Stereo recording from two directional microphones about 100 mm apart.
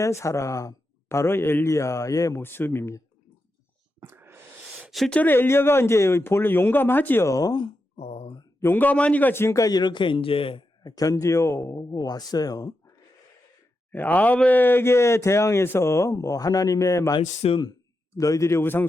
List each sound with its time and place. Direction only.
0.0 s speech: 30° left (ahead or behind)
2.4 s speech: 20° left (ahead or behind)
4.0 s a sound: 25° right (ahead or behind)
4.9 s speech: centre (ahead or behind)
5.1 s speech: 20° left (ahead or behind)
7.3 s a man's voice: 35° left (ahead or behind)
7.9 s a sound: 90° left
8.6 s a man's voice: 20° left (ahead or behind); by 10.7 s 60° left (ahead or behind)
10.8 s a man's voice: 35° left (ahead or behind)
13.9 s speech: 15° left (ahead or behind); by 17.2 s 35° left (ahead or behind)
17.2 s speech: 70° left (ahead or behind)
18.2 s speech: 35° left (ahead or behind)